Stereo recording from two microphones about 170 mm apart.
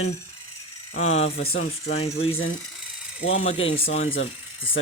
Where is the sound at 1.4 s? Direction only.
65° left (ahead or behind).